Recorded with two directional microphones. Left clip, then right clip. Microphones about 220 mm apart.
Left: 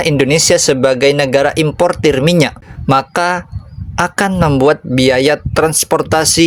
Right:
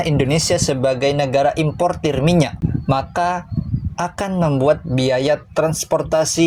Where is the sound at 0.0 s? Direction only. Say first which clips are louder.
Left 7 dB; 45° left (ahead or behind).